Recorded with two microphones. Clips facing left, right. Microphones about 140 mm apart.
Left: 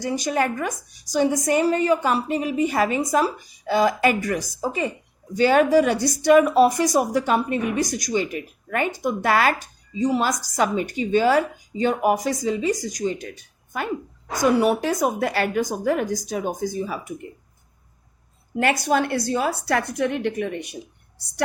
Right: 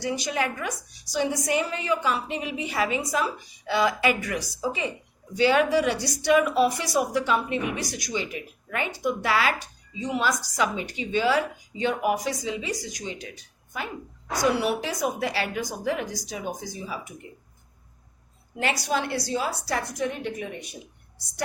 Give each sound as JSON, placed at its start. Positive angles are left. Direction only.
{"t": 0.0, "sound": "a woman's voice", "side_deg": 45}
{"t": 13.7, "sound": "a woman's voice", "side_deg": 55}
{"t": 14.5, "sound": "a woman's voice", "side_deg": 45}
{"t": 18.6, "sound": "a woman's voice", "side_deg": 50}